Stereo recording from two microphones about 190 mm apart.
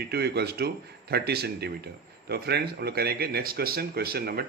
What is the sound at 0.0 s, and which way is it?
Speech, 60° right (ahead or behind).